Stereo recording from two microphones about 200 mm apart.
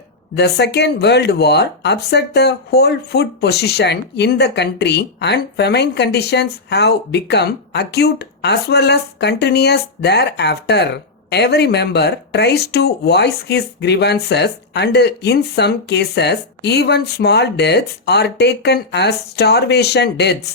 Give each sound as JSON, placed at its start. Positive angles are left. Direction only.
{"t": 0.3, "sound": "speech", "side_deg": 55}